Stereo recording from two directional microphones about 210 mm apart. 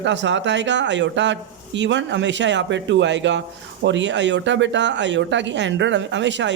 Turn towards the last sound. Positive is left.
turn(degrees=-60)  # may be behind; listen again after turning